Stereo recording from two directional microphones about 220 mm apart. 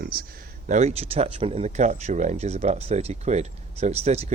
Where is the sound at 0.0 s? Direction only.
45° right (ahead or behind).